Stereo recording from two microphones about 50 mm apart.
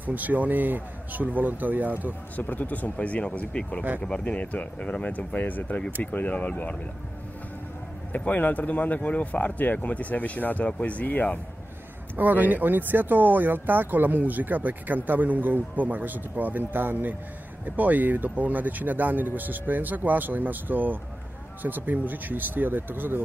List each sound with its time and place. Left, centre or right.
0.0 s speech: right
2.3 s speech: left
8.1 s speech: left
12.2 s speech: right